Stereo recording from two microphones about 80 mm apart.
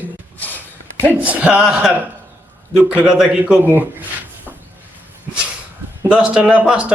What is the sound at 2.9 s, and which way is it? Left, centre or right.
Speech, centre.